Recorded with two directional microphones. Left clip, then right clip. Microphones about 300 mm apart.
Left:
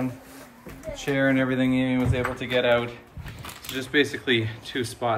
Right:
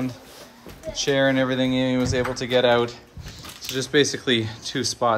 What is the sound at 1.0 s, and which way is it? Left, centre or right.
Speech, centre.